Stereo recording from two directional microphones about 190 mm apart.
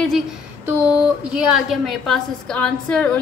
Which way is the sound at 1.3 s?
5° right (ahead or behind).